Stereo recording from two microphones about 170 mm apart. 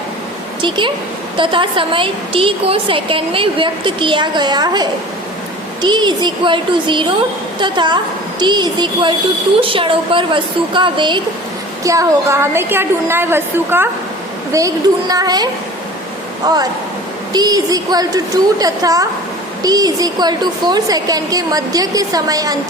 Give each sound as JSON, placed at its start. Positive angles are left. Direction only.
{"t": 0.6, "sound": "a woman's voice", "side_deg": -30}
{"t": 16.5, "sound": "a woman's voice", "side_deg": -25}